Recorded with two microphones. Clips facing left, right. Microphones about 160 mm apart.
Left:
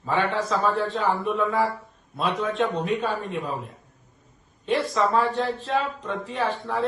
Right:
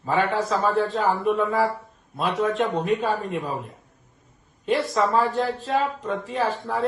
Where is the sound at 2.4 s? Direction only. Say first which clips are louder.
Right 4 dB; 40° right (ahead or behind).